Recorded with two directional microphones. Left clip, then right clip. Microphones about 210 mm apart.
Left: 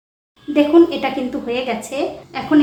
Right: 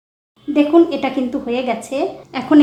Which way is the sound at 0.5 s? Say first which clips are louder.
Even; 30° right (ahead or behind).